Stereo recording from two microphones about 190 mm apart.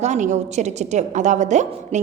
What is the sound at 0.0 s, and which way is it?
A woman's voice, 40° right (ahead or behind).